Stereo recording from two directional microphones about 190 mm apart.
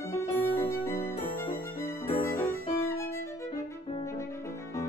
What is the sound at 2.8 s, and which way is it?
Violin, 15° left (ahead or behind).